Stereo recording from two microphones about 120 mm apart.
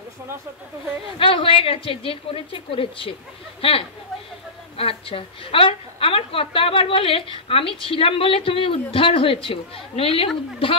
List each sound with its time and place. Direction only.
1.1 s a woman's voice: 50° left (ahead or behind)
4.7 s a woman's voice: 50° left (ahead or behind)